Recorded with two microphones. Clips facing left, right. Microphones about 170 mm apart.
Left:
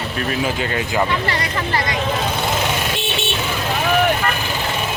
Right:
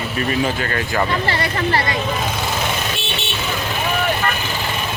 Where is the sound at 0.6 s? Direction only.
15° left (ahead or behind).